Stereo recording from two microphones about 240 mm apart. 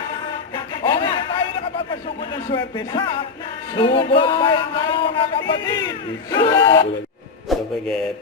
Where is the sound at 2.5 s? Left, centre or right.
Centre.